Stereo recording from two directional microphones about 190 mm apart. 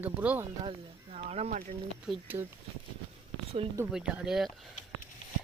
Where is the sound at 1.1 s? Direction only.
35° right (ahead or behind).